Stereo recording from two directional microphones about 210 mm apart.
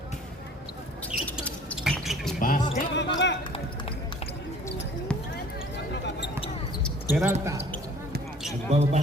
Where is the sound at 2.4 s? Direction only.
40° left (ahead or behind).